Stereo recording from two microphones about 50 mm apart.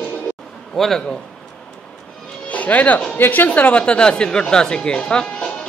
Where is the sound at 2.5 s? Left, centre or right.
Left.